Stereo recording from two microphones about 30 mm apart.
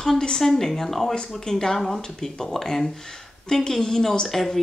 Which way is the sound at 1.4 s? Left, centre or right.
Centre.